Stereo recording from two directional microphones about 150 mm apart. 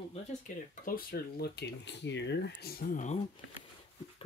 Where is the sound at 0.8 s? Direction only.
85° left; by 3.2 s 60° left (ahead or behind).